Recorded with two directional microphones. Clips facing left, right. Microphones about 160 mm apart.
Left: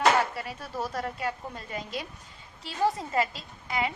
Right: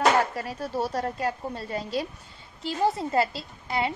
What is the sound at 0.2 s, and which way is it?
A woman's voice, 40° right (ahead or behind).